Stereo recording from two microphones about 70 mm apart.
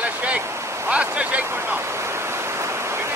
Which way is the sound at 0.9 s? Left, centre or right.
Centre.